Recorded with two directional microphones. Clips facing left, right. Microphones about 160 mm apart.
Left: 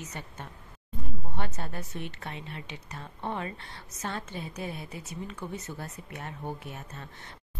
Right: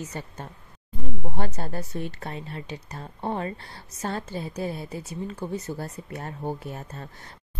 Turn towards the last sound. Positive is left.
turn(degrees=-35)  # may be behind; listen again after turning